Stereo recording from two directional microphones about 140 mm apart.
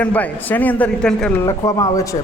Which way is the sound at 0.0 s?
10° left (ahead or behind).